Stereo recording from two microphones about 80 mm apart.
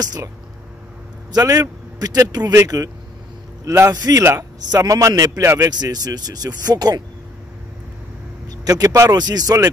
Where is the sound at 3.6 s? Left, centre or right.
Right.